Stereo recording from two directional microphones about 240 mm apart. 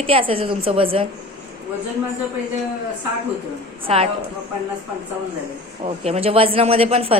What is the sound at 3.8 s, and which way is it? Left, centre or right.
Speech, right.